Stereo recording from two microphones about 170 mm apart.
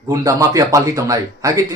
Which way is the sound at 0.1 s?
20° right (ahead or behind).